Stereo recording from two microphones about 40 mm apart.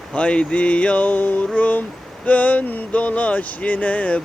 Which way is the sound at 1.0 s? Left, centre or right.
Left.